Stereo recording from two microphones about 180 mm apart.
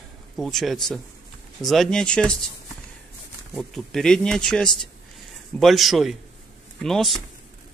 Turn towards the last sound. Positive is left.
turn(degrees=0)  # may be behind; listen again after turning